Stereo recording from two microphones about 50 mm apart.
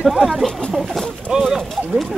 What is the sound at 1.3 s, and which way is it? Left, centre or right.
Speech, right.